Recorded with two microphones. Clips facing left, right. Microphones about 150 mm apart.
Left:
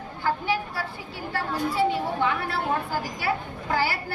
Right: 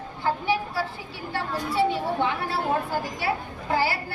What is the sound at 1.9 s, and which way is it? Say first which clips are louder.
Speech: even; 30° right (ahead or behind).